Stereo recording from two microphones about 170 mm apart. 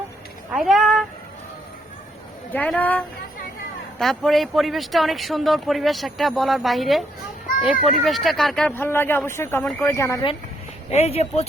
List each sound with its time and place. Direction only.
0.5 s speech: centre (ahead or behind)
2.5 s a man's voice: 10° left (ahead or behind)
8.7 s a man's voice: 15° left (ahead or behind)
10.9 s speech: 40° left (ahead or behind)